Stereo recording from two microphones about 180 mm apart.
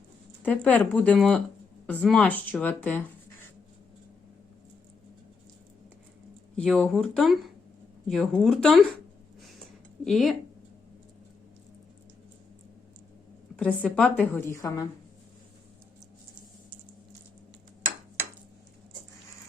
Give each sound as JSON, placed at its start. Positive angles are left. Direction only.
{"t": 0.4, "sound": "speech", "side_deg": 10}
{"t": 6.6, "sound": "speech", "side_deg": 5}
{"t": 10.0, "sound": "speech", "side_deg": 0}
{"t": 13.6, "sound": "speech", "side_deg": 5}
{"t": 14.5, "sound": "a woman's voice", "side_deg": 20}